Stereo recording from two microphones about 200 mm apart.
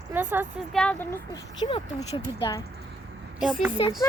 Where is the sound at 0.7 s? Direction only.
5° left (ahead or behind).